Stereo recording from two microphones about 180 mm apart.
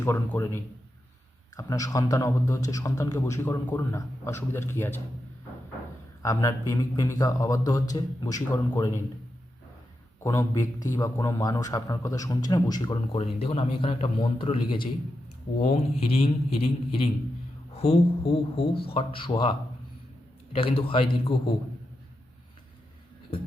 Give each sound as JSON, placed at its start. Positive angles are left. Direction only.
{"t": 0.0, "sound": "a man's voice", "side_deg": 10}
{"t": 6.2, "sound": "a man's voice", "side_deg": 20}
{"t": 10.2, "sound": "a man's voice", "side_deg": 20}